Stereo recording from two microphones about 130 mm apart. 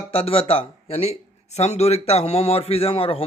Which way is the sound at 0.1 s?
45° left (ahead or behind).